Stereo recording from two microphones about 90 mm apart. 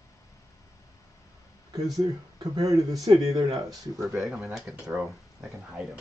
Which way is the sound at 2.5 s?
40° right (ahead or behind).